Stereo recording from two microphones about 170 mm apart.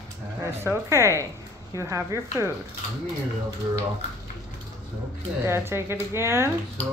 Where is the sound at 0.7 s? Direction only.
15° right (ahead or behind).